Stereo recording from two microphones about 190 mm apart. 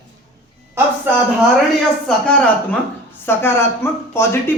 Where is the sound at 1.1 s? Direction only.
10° right (ahead or behind).